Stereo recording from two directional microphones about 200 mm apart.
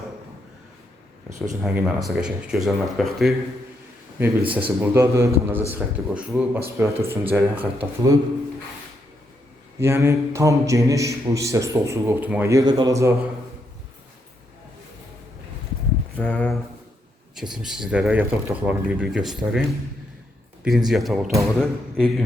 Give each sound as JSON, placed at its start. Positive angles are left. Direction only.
{"t": 1.6, "sound": "a man's voice", "side_deg": -5}
{"t": 9.8, "sound": "a man's voice", "side_deg": -10}
{"t": 16.1, "sound": "speech", "side_deg": 5}
{"t": 20.7, "sound": "speech", "side_deg": 0}